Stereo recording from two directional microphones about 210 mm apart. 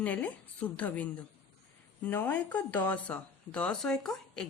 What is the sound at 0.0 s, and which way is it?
Speech, 5° left (ahead or behind).